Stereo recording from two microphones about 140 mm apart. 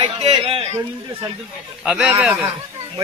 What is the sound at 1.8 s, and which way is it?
Speech, 5° right (ahead or behind).